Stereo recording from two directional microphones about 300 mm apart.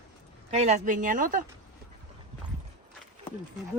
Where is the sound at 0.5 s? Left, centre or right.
Right.